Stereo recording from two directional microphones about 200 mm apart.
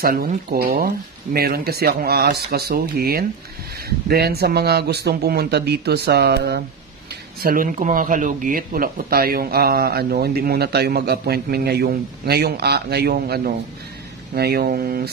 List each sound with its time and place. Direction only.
0.0 s speech: 45° right (ahead or behind)